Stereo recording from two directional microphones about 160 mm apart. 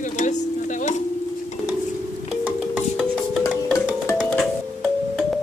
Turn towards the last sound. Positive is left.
turn(degrees=0)  # may be behind; listen again after turning